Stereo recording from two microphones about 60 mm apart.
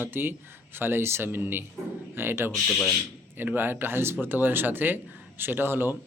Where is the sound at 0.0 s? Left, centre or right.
Right.